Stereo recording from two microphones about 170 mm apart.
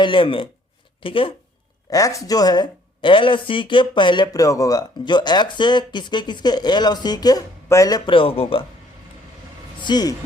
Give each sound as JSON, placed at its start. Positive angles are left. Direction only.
{"t": 0.0, "sound": "speech", "side_deg": 30}
{"t": 1.9, "sound": "speech", "side_deg": 20}
{"t": 9.8, "sound": "speech", "side_deg": 25}